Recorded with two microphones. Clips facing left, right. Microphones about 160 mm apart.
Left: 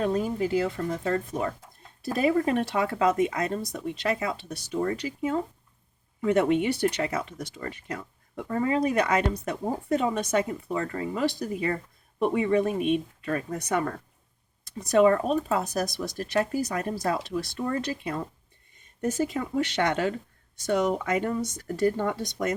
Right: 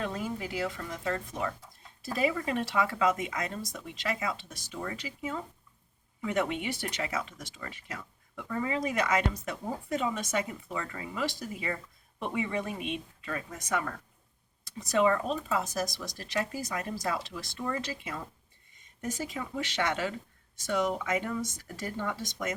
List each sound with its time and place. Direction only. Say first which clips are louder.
0.0 s speech: left 8 dB; 40° left (ahead or behind)